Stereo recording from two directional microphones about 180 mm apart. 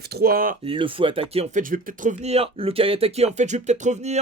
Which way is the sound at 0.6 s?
30° right (ahead or behind).